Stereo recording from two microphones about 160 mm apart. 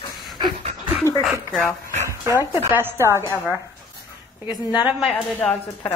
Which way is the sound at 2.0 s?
15° right (ahead or behind).